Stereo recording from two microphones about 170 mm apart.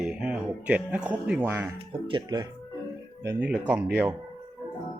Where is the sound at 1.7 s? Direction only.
25° right (ahead or behind); by 3.8 s 5° right (ahead or behind).